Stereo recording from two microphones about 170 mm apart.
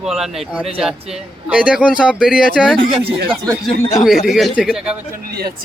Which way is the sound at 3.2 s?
20° right (ahead or behind).